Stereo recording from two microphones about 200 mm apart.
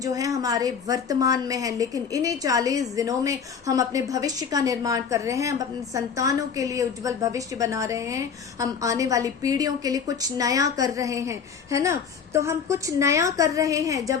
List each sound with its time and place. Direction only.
0.0 s a woman's voice: 15° right (ahead or behind)